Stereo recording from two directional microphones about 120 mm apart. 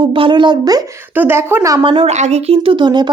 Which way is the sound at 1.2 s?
15° right (ahead or behind).